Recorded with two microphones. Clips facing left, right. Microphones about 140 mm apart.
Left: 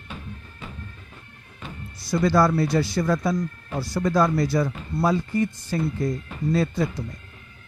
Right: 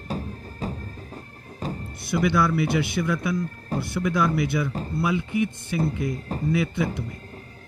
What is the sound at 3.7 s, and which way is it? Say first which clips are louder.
Music: right 2 dB; 40° right (ahead or behind).